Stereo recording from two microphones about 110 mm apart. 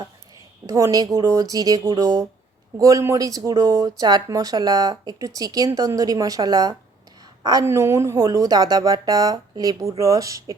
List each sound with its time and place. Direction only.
0.7 s speech: 30° right (ahead or behind)
7.6 s speech: 25° right (ahead or behind)